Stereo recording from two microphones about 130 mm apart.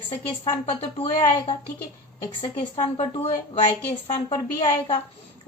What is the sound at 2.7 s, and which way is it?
Speech, 50° left (ahead or behind).